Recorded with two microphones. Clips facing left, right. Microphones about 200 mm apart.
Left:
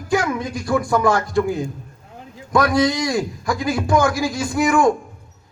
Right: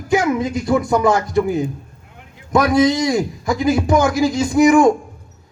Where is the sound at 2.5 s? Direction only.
20° right (ahead or behind).